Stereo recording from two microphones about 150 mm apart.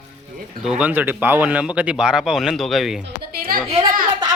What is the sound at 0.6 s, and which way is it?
Speech, 5° right (ahead or behind).